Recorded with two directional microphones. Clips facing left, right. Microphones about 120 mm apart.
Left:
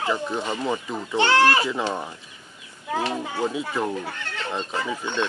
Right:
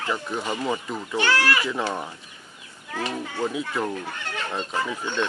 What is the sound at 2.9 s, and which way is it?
Speech, 20° left (ahead or behind).